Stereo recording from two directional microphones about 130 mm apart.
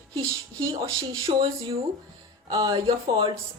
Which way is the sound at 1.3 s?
55° right (ahead or behind).